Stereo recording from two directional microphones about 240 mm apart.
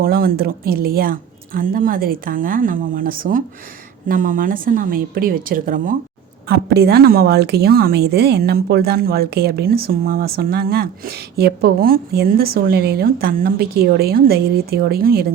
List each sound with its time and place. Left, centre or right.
0.0 s speech: right